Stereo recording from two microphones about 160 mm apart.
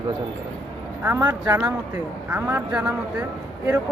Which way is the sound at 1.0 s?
10° right (ahead or behind).